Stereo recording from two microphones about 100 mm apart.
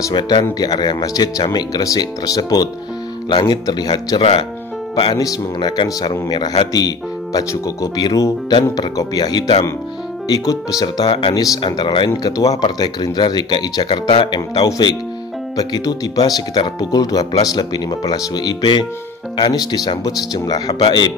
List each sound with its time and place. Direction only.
0.1 s speech: 45° left (ahead or behind)
4.2 s speech: 60° left (ahead or behind)
4.9 s speech: 45° left (ahead or behind)
11.1 s speech: 50° left (ahead or behind)
12.2 s speech: 40° left (ahead or behind)